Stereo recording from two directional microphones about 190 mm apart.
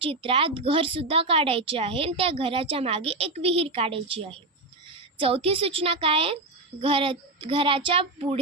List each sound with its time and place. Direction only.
0.0 s speech: 30° right (ahead or behind)